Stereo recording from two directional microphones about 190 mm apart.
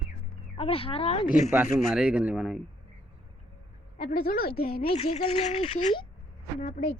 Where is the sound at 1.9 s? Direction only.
5° right (ahead or behind).